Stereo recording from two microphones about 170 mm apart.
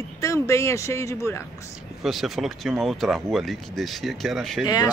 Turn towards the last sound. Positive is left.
turn(degrees=0)  # may be behind; listen again after turning